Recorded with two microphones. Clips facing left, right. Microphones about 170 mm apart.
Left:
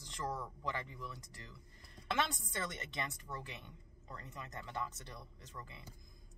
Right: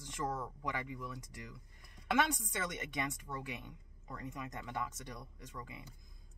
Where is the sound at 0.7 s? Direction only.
10° right (ahead or behind).